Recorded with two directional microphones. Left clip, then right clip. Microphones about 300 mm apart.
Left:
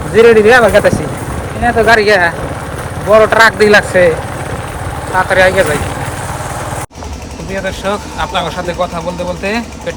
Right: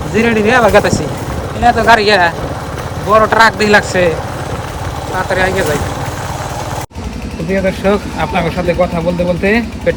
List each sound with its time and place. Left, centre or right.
0.1 s speech: centre
5.1 s speech: centre
7.5 s speech: centre